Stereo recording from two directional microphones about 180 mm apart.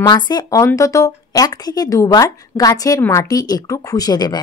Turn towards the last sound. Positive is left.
turn(degrees=25)  # may be behind; listen again after turning